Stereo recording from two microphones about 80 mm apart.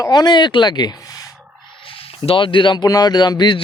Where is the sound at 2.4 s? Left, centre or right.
Left.